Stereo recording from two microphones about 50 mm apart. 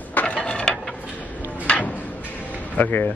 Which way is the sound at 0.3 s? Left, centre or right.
Left.